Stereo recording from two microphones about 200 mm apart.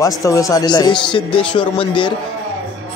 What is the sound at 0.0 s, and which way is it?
A man's voice, 15° left (ahead or behind).